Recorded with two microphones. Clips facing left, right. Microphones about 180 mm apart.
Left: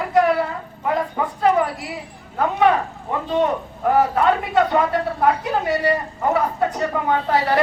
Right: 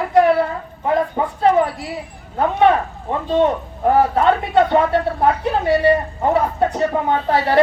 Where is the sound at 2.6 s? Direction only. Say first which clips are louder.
Right 3 dB; 25° right (ahead or behind).